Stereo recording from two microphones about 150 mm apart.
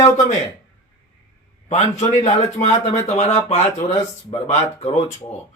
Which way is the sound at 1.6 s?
45° left (ahead or behind).